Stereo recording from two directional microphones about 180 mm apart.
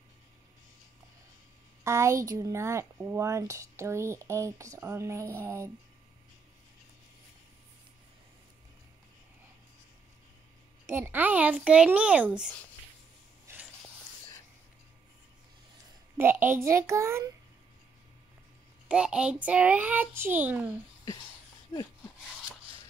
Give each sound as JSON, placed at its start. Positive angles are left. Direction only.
{"t": 1.9, "sound": "speech", "side_deg": -15}
{"t": 10.9, "sound": "speech", "side_deg": -10}
{"t": 13.5, "sound": "a sound", "side_deg": -15}
{"t": 16.2, "sound": "speech", "side_deg": -10}
{"t": 18.9, "sound": "a woman's voice", "side_deg": -5}